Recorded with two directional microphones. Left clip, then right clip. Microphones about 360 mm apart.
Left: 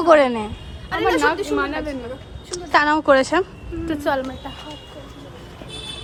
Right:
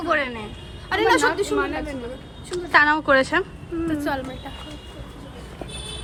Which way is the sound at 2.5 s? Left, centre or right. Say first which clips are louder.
Even; centre.